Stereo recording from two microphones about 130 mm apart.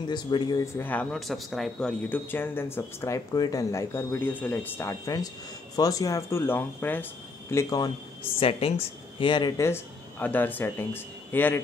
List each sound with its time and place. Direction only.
0.0 s speech: 35° left (ahead or behind)
0.7 s speech: 10° left (ahead or behind)
1.2 s speech: centre (ahead or behind); by 3.2 s 20° left (ahead or behind)
3.3 s speech: 30° left (ahead or behind)
7.5 s speech: 30° left (ahead or behind)
8.2 s speech: 45° left (ahead or behind)
9.6 s speech: 15° left (ahead or behind)